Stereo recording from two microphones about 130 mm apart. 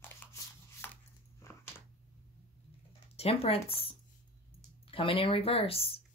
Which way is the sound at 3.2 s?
50° left (ahead or behind).